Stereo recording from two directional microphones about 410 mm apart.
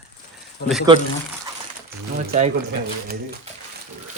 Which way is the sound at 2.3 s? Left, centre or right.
Centre.